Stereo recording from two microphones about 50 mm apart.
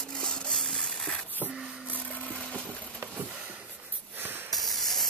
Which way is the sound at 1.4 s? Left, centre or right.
Left.